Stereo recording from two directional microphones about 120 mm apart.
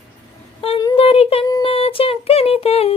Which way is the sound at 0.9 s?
55° left (ahead or behind).